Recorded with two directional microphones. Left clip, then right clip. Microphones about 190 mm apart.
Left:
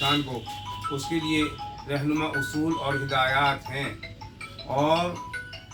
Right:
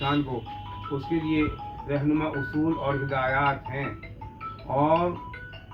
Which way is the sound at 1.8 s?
20° left (ahead or behind).